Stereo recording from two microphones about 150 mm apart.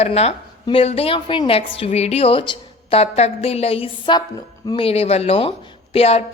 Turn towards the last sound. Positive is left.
turn(degrees=40)  # may be behind; listen again after turning